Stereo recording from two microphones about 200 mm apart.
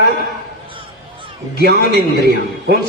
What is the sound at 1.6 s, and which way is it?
Speech, 55° right (ahead or behind).